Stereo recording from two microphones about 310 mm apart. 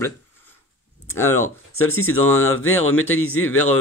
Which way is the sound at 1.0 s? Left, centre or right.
Centre.